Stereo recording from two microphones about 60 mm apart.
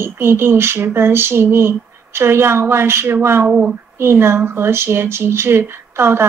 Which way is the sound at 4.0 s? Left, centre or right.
Right.